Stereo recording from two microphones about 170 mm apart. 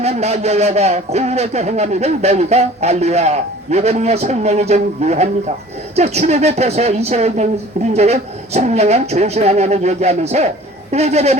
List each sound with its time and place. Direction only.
0.0 s speech: 40° right (ahead or behind)